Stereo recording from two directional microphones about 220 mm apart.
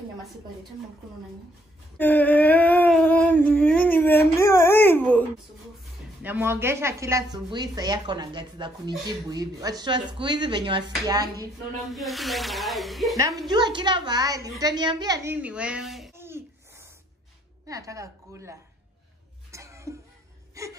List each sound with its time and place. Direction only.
2.0 s a sound: 10° left (ahead or behind)
6.2 s a woman's voice: 10° right (ahead or behind)
11.9 s speech: centre (ahead or behind)
13.5 s a woman's voice: 20° right (ahead or behind)
15.3 s speech: 5° right (ahead or behind)
16.2 s a sound: 10° right (ahead or behind)
17.6 s a woman's voice: 15° right (ahead or behind)
19.5 s cough: 15° right (ahead or behind)
20.6 s wail: 15° right (ahead or behind)